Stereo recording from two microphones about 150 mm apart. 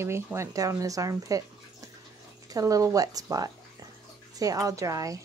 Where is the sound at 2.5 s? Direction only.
20° right (ahead or behind).